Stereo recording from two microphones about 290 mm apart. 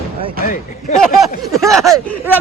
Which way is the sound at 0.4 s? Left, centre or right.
Left.